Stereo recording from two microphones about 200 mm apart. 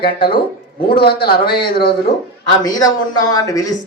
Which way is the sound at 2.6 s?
20° left (ahead or behind).